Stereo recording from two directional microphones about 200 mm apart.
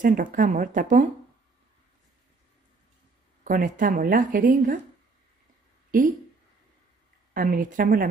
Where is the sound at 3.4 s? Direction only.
45° right (ahead or behind).